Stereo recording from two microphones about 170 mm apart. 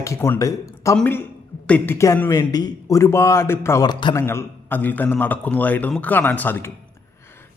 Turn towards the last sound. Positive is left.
turn(degrees=10)  # may be behind; listen again after turning